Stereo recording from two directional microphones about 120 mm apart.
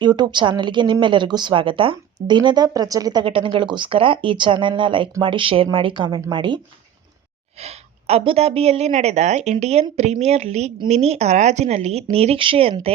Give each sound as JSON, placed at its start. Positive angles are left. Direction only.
{"t": 0.0, "sound": "speech", "side_deg": -40}
{"t": 7.6, "sound": "a woman's voice", "side_deg": -60}